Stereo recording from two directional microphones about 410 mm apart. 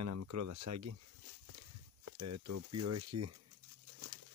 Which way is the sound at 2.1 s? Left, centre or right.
Right.